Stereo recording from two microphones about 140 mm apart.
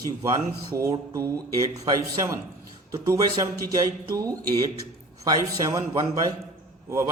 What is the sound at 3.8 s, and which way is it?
A man's voice, 25° right (ahead or behind).